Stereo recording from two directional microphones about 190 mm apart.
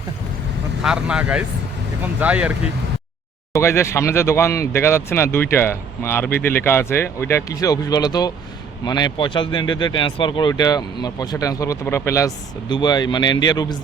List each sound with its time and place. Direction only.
0.8 s speech: 5° right (ahead or behind)
3.5 s speech: 15° left (ahead or behind)